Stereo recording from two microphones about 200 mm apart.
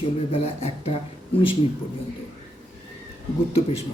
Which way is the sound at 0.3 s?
30° left (ahead or behind).